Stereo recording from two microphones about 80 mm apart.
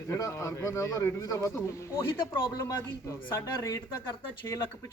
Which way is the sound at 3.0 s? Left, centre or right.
Left.